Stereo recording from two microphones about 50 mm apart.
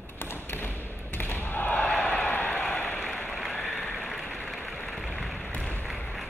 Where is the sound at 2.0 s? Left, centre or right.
Left.